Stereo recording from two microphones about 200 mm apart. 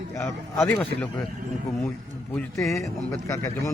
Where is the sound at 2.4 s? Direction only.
15° left (ahead or behind).